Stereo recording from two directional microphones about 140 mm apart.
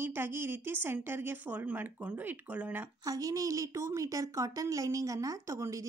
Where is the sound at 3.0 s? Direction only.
25° right (ahead or behind).